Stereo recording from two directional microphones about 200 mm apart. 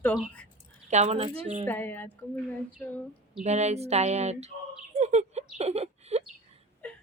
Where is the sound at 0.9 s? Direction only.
35° right (ahead or behind).